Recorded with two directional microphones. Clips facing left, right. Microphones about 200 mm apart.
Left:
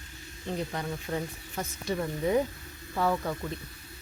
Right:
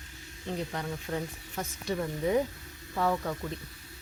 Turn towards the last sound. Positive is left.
turn(degrees=5)  # may be behind; listen again after turning